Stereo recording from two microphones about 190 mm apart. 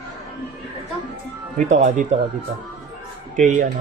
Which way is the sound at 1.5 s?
40° right (ahead or behind).